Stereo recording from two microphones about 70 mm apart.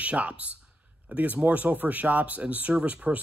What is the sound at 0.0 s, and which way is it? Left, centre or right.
Speech, centre.